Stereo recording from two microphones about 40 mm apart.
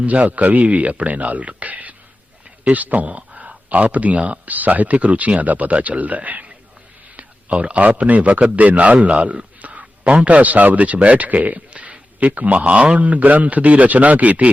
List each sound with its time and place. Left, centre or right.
0.0 s a man's voice: right